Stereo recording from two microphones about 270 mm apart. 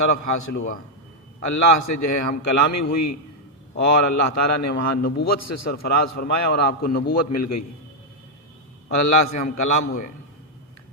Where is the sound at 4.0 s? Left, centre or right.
Left.